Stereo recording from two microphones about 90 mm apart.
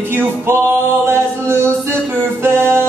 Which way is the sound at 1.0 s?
25° right (ahead or behind).